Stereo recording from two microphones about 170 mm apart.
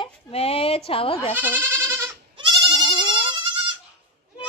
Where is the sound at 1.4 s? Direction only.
10° right (ahead or behind).